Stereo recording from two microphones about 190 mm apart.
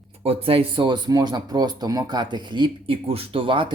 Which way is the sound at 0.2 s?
30° right (ahead or behind).